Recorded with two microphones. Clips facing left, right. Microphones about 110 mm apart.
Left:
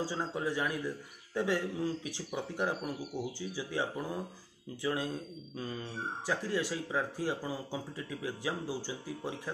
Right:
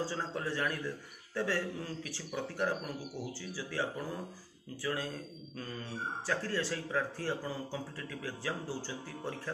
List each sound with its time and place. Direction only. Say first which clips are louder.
0.0 s speech: left 2 dB; 15° left (ahead or behind)
4.8 s speech: left 3 dB; 20° left (ahead or behind)
6.2 s speech: left 2 dB; 15° left (ahead or behind)